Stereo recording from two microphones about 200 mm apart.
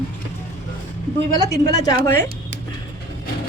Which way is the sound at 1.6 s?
20° left (ahead or behind).